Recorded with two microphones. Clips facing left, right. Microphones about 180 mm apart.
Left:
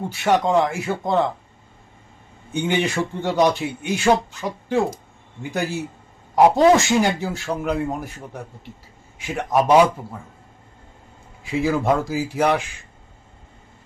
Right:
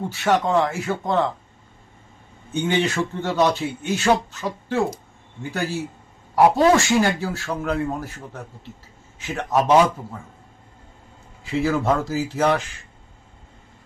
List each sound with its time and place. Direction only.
0.1 s a man's voice: 15° left (ahead or behind)
2.5 s a man's voice: 15° left (ahead or behind)
11.4 s a man's voice: 10° left (ahead or behind)